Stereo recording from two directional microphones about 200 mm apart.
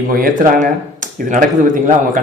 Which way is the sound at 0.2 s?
40° right (ahead or behind).